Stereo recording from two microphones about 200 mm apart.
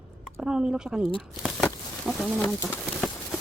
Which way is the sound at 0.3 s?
5° right (ahead or behind).